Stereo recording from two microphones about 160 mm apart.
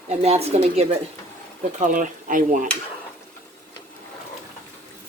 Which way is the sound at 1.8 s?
55° right (ahead or behind).